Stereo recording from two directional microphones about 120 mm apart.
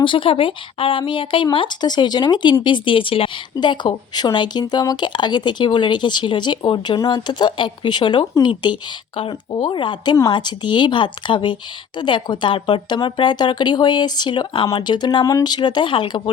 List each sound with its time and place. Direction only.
0.0 s speech: 45° left (ahead or behind)